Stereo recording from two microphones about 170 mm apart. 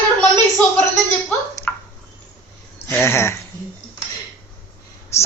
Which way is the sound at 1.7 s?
10° left (ahead or behind).